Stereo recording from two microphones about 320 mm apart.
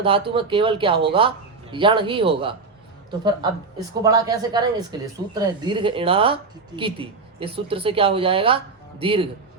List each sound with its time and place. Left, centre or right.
0.0 s speech: centre